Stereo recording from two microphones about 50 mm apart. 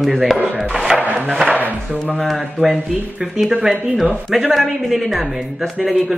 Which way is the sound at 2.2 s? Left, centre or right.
Centre.